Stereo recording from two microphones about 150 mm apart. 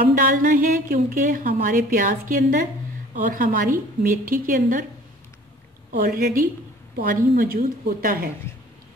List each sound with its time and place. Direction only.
0.0 s a woman's voice: 70° right (ahead or behind)
5.9 s a woman's voice: 85° right